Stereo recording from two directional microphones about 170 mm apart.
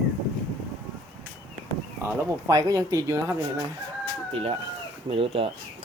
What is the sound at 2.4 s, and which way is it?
Speech, 20° right (ahead or behind).